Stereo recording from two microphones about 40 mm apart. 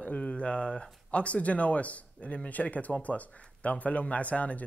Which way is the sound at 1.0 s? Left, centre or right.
Left.